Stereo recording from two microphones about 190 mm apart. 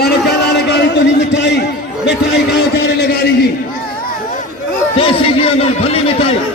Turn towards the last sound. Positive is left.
turn(degrees=30)  # may be behind; listen again after turning